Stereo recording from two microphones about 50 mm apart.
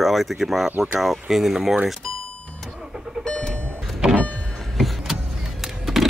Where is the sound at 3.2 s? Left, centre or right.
Left.